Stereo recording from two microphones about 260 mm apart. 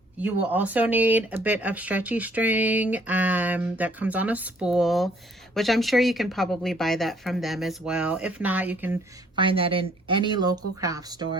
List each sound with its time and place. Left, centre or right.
0.2 s speech: centre
9.3 s speech: centre